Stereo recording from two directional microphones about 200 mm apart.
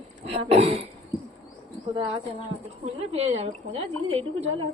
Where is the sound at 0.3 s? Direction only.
30° right (ahead or behind).